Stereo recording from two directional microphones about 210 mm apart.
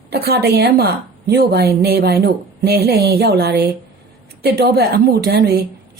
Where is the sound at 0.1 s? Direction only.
50° right (ahead or behind).